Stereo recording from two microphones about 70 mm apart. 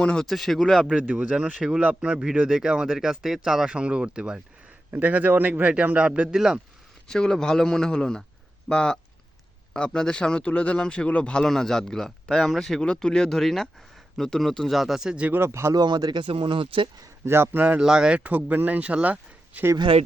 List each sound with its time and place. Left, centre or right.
0.0 s speech: centre
0.3 s speech: centre
0.9 s a man's voice: centre
7.1 s speech: centre
15.3 s speech: right
15.7 s speech: right
17.2 s speech: right
17.7 s speech: centre
18.2 s a man's voice: right